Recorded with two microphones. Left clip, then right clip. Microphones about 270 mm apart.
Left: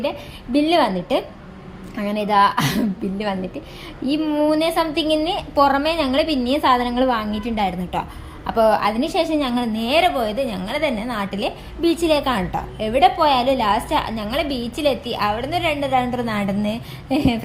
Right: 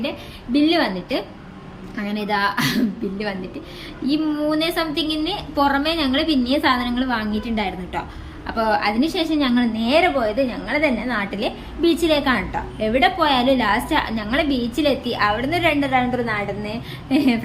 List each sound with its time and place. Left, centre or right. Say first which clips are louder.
0.5 s a woman's voice: left 1 dB; centre